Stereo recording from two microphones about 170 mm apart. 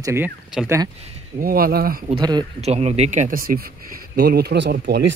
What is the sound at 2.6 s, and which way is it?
Speech, 40° right (ahead or behind).